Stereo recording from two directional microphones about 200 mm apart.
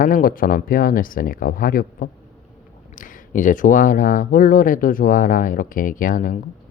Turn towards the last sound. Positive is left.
turn(degrees=45)  # may be behind; listen again after turning